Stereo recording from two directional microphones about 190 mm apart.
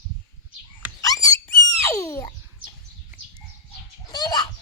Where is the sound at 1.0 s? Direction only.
20° left (ahead or behind).